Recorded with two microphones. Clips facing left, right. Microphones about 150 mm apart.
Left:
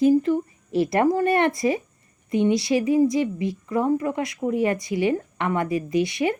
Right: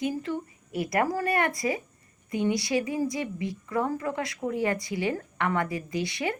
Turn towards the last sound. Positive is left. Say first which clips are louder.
# left 8 dB
turn(degrees=20)  # may be behind; listen again after turning